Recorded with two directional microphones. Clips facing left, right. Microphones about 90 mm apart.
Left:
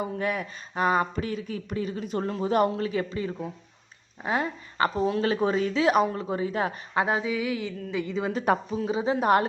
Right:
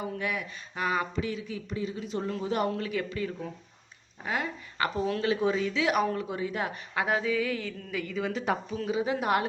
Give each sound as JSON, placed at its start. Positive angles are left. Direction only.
{"t": 0.2, "sound": "speech", "side_deg": 40}
{"t": 7.2, "sound": "a sound", "side_deg": 15}
{"t": 8.3, "sound": "speech", "side_deg": 40}
{"t": 8.9, "sound": "speech", "side_deg": 30}